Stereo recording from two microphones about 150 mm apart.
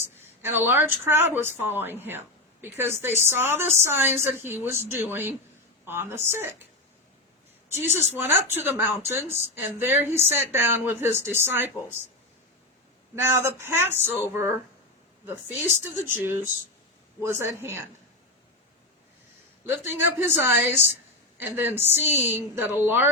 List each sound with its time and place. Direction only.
0.0 s speech: 15° right (ahead or behind)
7.7 s speech: 15° right (ahead or behind)
13.2 s speech: 15° right (ahead or behind)
19.6 s speech: 15° right (ahead or behind)